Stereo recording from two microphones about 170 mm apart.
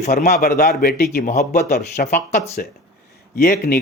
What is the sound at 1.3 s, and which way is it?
Speech, 45° left (ahead or behind).